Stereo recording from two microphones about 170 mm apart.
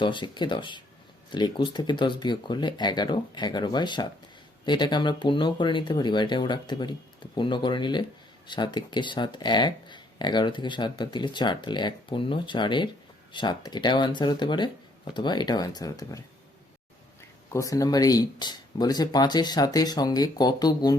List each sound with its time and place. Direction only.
0.0 s speech: 30° left (ahead or behind)
17.5 s speech: 20° left (ahead or behind)